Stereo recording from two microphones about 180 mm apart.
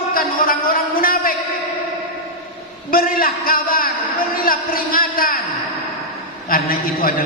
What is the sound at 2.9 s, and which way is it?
A man's voice, 55° left (ahead or behind).